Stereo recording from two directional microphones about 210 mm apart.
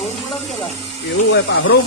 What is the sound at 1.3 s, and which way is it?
Speech, 65° left (ahead or behind).